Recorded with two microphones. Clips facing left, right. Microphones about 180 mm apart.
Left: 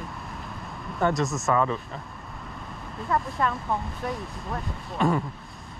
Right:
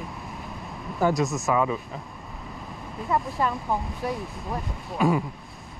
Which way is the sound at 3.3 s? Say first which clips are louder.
Right 1 dB; centre (ahead or behind).